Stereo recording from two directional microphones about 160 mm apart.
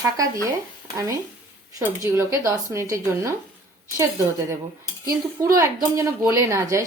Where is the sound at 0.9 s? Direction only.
20° right (ahead or behind).